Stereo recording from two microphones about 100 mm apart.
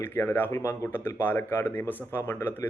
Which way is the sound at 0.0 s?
25° left (ahead or behind).